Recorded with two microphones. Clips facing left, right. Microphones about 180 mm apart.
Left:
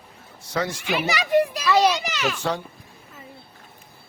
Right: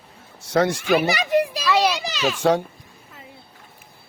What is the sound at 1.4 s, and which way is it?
Children playing, 10° right (ahead or behind).